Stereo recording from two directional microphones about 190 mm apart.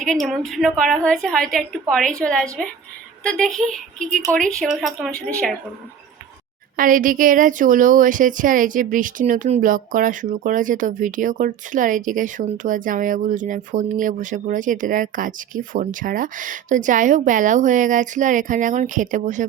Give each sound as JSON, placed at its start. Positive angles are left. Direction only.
{"t": 0.0, "sound": "a woman's voice", "side_deg": 5}
{"t": 6.7, "sound": "speech", "side_deg": -45}